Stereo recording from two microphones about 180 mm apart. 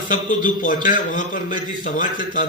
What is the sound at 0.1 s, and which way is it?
A man's voice, 50° left (ahead or behind).